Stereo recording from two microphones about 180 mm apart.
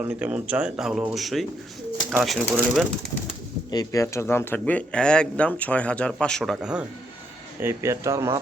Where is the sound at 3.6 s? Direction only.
20° left (ahead or behind); by 6.8 s centre (ahead or behind).